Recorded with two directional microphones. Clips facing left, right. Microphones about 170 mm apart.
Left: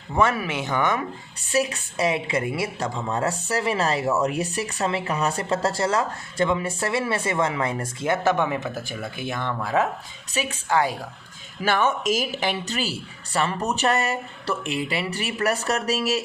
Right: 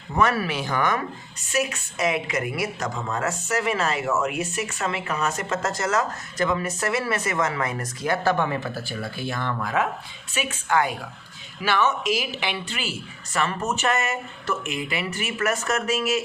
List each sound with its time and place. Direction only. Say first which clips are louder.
0.2 s speech: even; 25° left (ahead or behind)
1.5 s speech: left 2 dB; 35° left (ahead or behind)
10.3 s speech: even; 35° left (ahead or behind)
11.6 s speech: left 1 dB; 50° left (ahead or behind)